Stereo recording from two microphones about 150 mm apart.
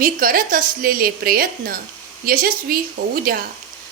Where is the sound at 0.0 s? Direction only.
70° right (ahead or behind).